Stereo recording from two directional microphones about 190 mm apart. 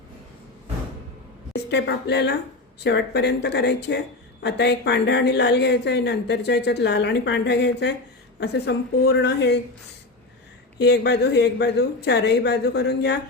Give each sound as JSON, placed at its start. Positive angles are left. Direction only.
{"t": 1.5, "sound": "speech", "side_deg": 65}
{"t": 10.8, "sound": "speech", "side_deg": 60}